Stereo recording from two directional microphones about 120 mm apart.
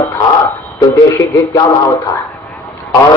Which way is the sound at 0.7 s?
30° left (ahead or behind).